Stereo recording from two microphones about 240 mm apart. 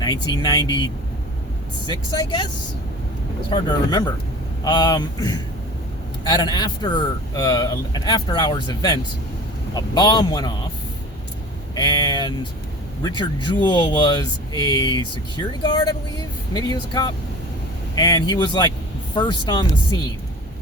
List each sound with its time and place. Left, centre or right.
0.0 s a man's voice: centre
1.9 s speech: centre
3.5 s a man's voice: centre
11.7 s a man's voice: centre
17.9 s a man's voice: centre